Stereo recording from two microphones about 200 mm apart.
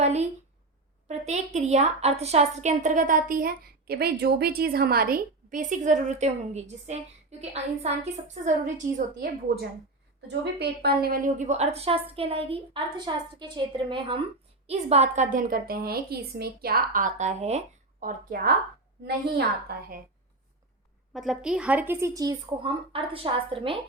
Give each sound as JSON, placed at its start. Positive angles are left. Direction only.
{"t": 0.0, "sound": "a woman's voice", "side_deg": -35}
{"t": 10.4, "sound": "a woman's voice", "side_deg": -55}
{"t": 18.0, "sound": "a woman's voice", "side_deg": -45}
{"t": 21.1, "sound": "a woman's voice", "side_deg": 0}